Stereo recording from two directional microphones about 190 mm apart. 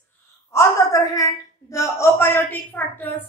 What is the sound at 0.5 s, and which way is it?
A man's voice, 15° left (ahead or behind).